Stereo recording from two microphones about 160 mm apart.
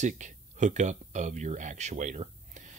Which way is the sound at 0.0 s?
50° right (ahead or behind).